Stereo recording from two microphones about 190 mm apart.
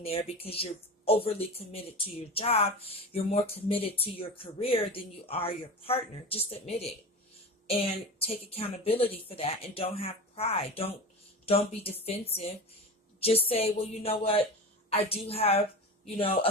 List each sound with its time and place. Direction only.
0.0 s speech: 30° left (ahead or behind)